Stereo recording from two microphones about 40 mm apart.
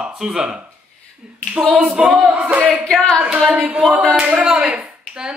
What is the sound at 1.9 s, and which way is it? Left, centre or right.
Speech, right.